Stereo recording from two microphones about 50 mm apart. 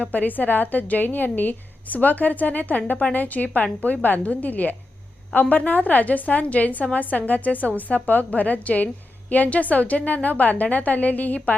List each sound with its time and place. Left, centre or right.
0.0 s a woman's voice: left